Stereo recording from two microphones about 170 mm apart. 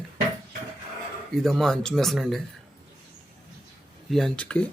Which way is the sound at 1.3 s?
Centre (ahead or behind).